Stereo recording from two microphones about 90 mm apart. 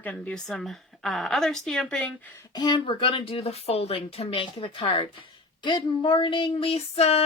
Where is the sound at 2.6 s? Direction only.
60° left (ahead or behind); by 5.0 s 85° left.